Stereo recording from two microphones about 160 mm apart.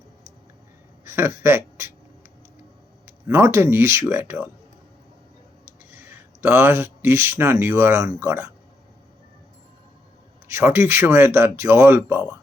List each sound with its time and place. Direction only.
1.0 s speech: 15° right (ahead or behind)
3.1 s speech: 15° right (ahead or behind)
5.9 s speech: 15° right (ahead or behind)
10.5 s speech: 15° right (ahead or behind)